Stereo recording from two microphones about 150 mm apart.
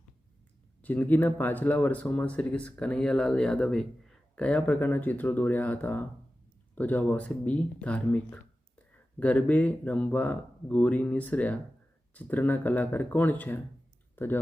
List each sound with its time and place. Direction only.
0.8 s speech: 10° left (ahead or behind)